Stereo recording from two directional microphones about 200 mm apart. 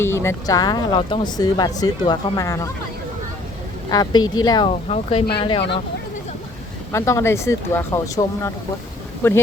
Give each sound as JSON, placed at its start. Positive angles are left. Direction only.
{"t": 0.0, "sound": "speech", "side_deg": 15}
{"t": 3.8, "sound": "speech", "side_deg": 20}
{"t": 6.9, "sound": "speech", "side_deg": 15}
{"t": 9.2, "sound": "speech", "side_deg": 10}